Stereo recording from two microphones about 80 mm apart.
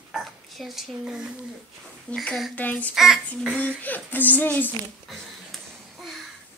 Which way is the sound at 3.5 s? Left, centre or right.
Centre.